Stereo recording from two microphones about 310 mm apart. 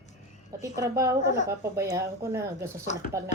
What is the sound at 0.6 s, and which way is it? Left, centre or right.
Speech, centre.